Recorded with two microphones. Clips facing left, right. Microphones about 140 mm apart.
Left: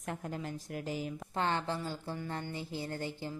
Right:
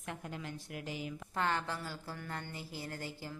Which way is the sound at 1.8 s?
20° left (ahead or behind).